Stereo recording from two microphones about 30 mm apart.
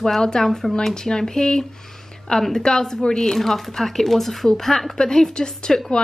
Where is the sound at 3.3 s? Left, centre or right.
Centre.